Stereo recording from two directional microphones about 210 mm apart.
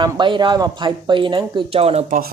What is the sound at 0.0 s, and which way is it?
Speech, 20° right (ahead or behind).